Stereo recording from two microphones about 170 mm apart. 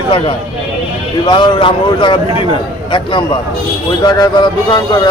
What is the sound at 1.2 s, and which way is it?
A man's voice, 30° left (ahead or behind).